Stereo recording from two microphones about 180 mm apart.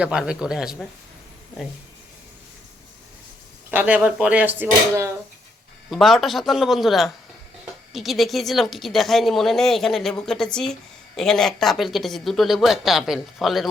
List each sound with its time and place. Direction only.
0.0 s speech: 5° right (ahead or behind)
3.7 s speech: 10° right (ahead or behind)
5.9 s speech: centre (ahead or behind)